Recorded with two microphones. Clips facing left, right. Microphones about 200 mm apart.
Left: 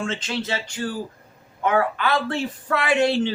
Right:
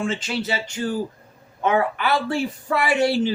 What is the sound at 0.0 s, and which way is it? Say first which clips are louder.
Speech: right 2 dB; 10° right (ahead or behind).